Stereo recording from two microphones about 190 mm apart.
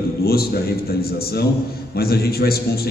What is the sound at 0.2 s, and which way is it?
A man's voice, 55° left (ahead or behind).